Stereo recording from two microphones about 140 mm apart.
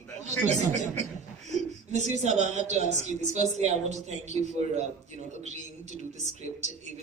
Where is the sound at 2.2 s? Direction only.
55° right (ahead or behind).